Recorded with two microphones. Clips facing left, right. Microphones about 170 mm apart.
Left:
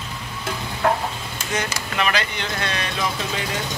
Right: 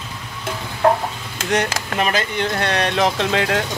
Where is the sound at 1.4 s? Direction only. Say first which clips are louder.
Right 7 dB; 80° right.